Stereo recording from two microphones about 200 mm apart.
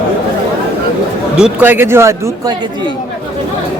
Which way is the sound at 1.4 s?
10° right (ahead or behind).